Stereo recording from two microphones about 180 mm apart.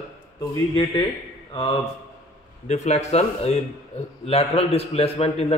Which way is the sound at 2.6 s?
40° left (ahead or behind).